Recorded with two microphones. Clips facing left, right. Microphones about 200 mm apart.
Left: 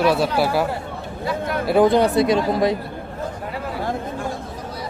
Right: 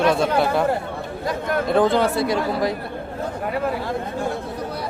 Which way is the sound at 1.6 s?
10° left (ahead or behind).